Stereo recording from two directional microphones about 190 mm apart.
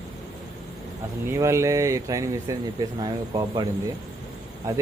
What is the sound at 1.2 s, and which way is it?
Speech, 15° right (ahead or behind).